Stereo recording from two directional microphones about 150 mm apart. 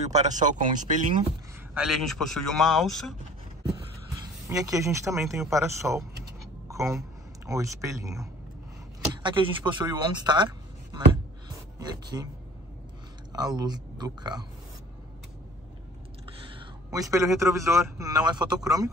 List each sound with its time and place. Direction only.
0.0 s speech: 50° right (ahead or behind)
1.7 s a man's voice: 5° right (ahead or behind)
4.1 s a man's voice: 25° right (ahead or behind)
9.2 s a man's voice: 30° right (ahead or behind)
11.4 s a sound: 25° right (ahead or behind)
13.3 s speech: 25° right (ahead or behind)
16.4 s a man's voice: 25° right (ahead or behind)